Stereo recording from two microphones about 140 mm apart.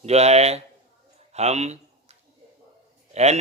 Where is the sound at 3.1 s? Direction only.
50° right (ahead or behind).